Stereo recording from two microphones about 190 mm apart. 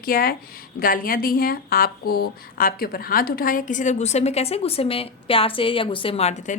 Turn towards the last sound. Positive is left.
turn(degrees=35)  # may be behind; listen again after turning